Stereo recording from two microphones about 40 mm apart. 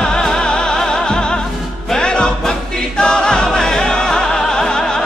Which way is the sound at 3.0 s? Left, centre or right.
Left.